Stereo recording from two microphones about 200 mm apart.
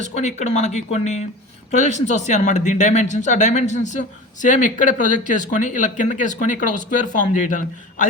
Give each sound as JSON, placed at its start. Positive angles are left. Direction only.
{"t": 0.0, "sound": "speech", "side_deg": 35}